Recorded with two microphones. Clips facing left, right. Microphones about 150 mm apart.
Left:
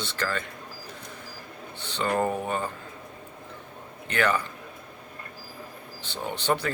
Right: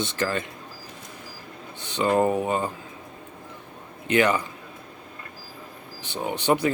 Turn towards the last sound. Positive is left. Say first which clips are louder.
# right 5 dB
turn(degrees=-15)  # may be behind; listen again after turning